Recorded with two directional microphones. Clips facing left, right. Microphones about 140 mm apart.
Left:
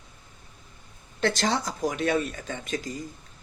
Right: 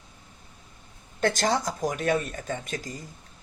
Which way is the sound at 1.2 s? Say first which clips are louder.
Right 1 dB; 45° right (ahead or behind).